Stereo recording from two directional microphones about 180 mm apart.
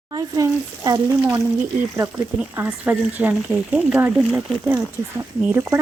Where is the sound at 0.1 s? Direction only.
20° right (ahead or behind).